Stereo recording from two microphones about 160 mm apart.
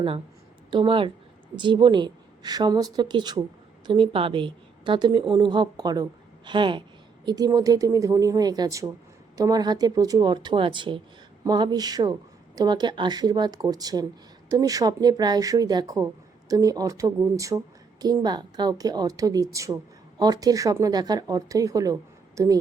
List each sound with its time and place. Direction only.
0.7 s a woman's voice: 30° right (ahead or behind)